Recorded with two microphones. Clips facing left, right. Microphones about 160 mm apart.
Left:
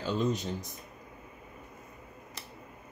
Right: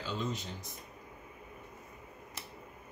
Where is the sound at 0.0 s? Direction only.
45° left (ahead or behind).